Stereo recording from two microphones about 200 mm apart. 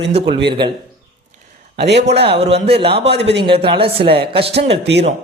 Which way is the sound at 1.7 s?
55° right (ahead or behind).